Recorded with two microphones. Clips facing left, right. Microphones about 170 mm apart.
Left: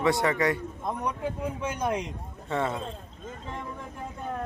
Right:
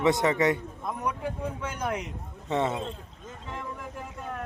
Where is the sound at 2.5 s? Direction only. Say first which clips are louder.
Right 2 dB; 20° right (ahead or behind).